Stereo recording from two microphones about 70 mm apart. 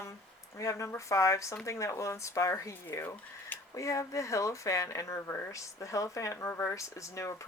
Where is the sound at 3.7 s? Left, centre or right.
Left.